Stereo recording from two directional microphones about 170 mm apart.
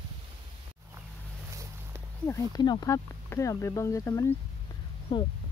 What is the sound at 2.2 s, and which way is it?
Speech, 20° left (ahead or behind).